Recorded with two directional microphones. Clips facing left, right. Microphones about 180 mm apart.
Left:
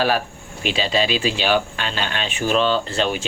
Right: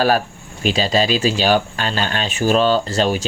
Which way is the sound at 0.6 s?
40° right (ahead or behind).